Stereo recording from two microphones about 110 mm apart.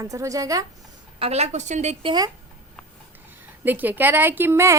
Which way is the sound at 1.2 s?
75° right (ahead or behind).